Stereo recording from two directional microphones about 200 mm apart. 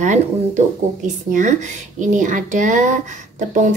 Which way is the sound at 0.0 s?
35° right (ahead or behind).